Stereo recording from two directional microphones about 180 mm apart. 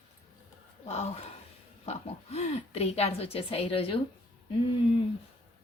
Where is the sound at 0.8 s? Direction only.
35° left (ahead or behind).